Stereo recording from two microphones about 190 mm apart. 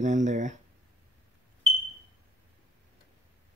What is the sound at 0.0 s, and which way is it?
Speech, 40° right (ahead or behind).